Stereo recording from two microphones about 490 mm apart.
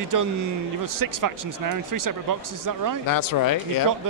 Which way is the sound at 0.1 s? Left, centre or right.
Right.